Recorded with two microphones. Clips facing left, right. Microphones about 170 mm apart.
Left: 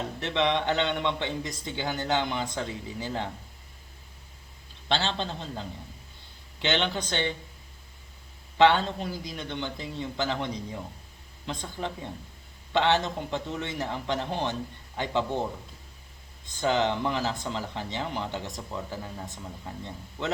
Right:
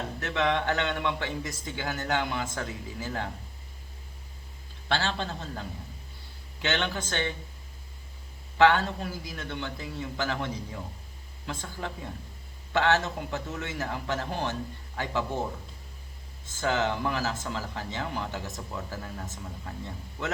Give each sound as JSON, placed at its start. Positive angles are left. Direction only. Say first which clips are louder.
{"t": 0.2, "sound": "speech", "louder": "left 1 dB", "side_deg": 20}
{"t": 4.9, "sound": "speech", "louder": "left 1 dB", "side_deg": 20}
{"t": 8.5, "sound": "speech", "louder": "left 1 dB", "side_deg": 20}
{"t": 16.5, "sound": "speech", "louder": "left 2 dB", "side_deg": 20}